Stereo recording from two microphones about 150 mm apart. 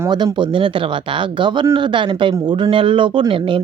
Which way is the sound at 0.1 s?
30° right (ahead or behind).